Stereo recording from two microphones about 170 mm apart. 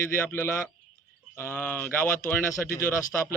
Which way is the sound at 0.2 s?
15° left (ahead or behind).